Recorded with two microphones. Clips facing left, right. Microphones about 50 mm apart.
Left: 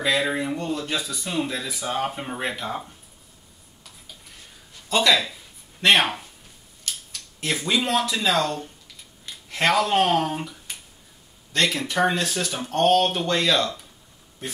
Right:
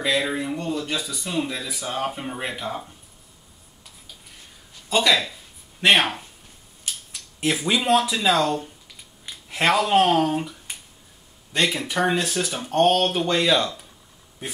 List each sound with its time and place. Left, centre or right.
0.0 s speech: centre
4.8 s speech: centre
6.8 s a sound: centre
7.5 s speech: centre
11.5 s speech: centre